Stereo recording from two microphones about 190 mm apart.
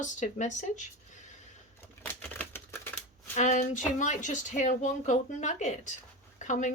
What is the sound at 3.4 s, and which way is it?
Speech, 40° left (ahead or behind).